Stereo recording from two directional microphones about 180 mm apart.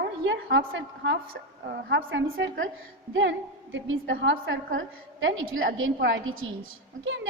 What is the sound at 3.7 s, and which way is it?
A woman's voice, 90° right.